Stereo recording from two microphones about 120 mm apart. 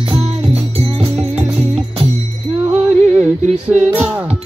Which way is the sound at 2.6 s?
15° right (ahead or behind).